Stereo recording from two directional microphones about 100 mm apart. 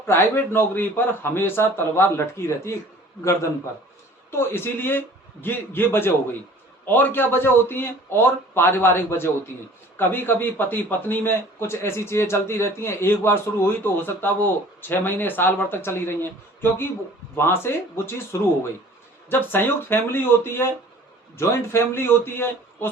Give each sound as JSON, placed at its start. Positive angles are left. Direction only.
{"t": 0.0, "sound": "a man's voice", "side_deg": 25}
{"t": 4.3, "sound": "a man's voice", "side_deg": 25}